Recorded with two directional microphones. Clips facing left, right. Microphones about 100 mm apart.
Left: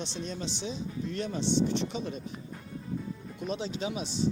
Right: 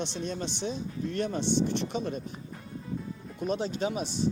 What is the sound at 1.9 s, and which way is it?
Speech, 45° right (ahead or behind).